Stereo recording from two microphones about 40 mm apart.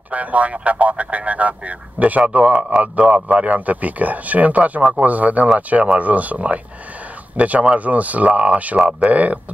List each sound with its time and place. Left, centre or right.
0.1 s speech: right
8.7 s speech: right
9.1 s speech: right